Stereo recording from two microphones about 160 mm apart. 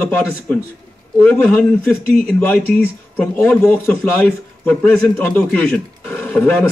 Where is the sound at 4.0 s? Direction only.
5° left (ahead or behind).